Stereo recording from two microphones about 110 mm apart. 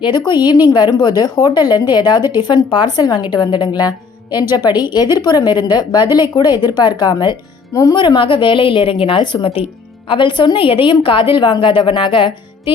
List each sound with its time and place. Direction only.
0.3 s a woman's voice: 40° left (ahead or behind)
7.7 s speech: 30° left (ahead or behind)
7.9 s a woman's voice: 50° left (ahead or behind)